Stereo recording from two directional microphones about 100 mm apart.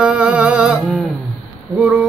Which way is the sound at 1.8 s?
10° right (ahead or behind).